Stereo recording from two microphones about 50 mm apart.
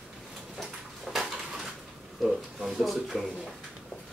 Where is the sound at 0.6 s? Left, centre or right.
Centre.